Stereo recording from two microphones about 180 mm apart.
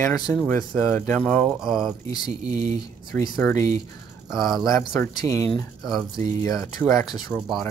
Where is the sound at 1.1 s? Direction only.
5° left (ahead or behind).